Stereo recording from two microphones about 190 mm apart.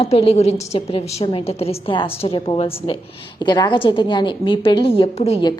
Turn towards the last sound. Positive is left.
turn(degrees=35)  # may be behind; listen again after turning